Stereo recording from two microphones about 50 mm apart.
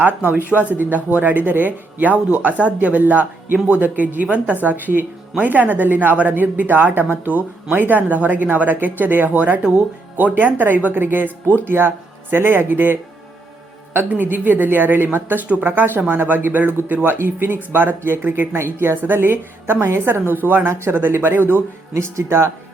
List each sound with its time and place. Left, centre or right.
0.0 s a woman's voice: right
14.2 s a woman's voice: right
18.5 s speech: right
19.0 s a woman's voice: right
22.3 s speech: right